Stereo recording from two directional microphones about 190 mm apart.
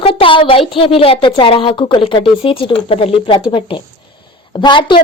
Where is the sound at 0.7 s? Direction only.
30° left (ahead or behind).